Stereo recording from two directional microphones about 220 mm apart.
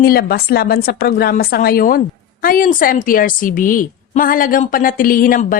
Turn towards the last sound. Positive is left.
turn(degrees=40)  # may be behind; listen again after turning